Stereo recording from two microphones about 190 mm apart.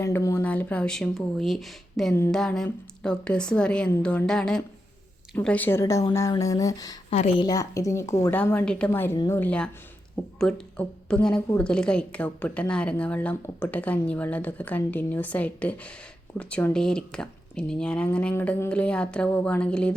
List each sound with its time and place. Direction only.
0.0 s a woman's voice: 15° left (ahead or behind)